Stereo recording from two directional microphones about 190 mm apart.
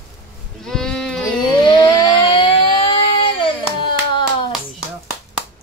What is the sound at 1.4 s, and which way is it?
Siren, 25° left (ahead or behind).